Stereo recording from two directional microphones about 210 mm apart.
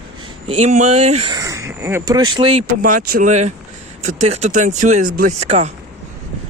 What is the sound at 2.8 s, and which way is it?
Speech, 40° right (ahead or behind).